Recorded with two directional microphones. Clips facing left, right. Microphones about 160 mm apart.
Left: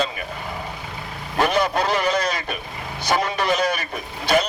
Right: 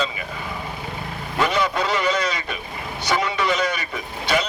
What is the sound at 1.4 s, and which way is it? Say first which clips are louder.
Vehicle: left 2 dB; 50° left (ahead or behind).